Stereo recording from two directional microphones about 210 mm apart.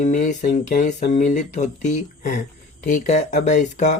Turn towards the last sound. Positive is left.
turn(degrees=35)  # may be behind; listen again after turning